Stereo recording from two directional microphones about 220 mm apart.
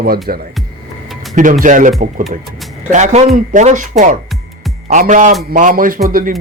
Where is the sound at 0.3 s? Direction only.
40° right (ahead or behind).